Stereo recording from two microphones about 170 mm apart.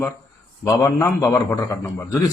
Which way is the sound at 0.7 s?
20° left (ahead or behind).